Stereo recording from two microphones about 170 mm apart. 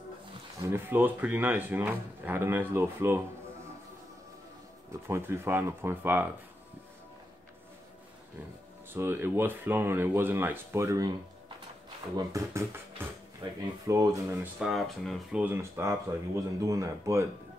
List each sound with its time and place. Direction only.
0.7 s speech: 10° right (ahead or behind)
4.9 s speech: 15° right (ahead or behind)
8.9 s speech: 15° right (ahead or behind)
12.3 s speech: 20° right (ahead or behind)
14.6 s speech: centre (ahead or behind); by 17.3 s 20° right (ahead or behind)